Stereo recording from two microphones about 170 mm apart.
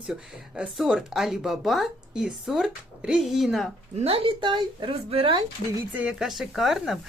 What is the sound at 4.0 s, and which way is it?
Speech, 35° right (ahead or behind).